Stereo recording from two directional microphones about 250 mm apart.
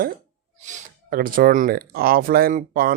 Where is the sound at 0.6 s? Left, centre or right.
Right.